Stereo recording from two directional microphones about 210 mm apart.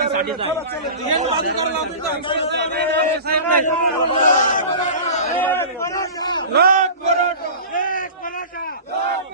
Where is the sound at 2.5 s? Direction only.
55° right (ahead or behind).